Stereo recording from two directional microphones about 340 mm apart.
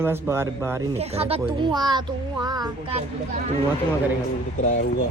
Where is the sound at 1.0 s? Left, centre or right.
Centre.